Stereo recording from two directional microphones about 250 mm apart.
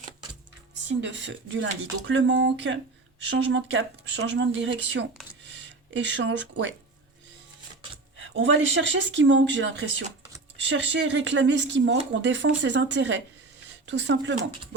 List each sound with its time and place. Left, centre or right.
0.9 s speech: right
8.2 s speech: right